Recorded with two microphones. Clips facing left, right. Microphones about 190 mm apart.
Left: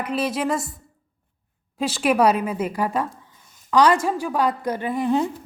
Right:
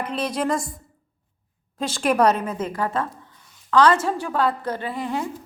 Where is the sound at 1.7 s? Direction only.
5° left (ahead or behind).